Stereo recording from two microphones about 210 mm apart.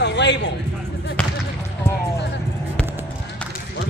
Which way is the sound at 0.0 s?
55° left (ahead or behind).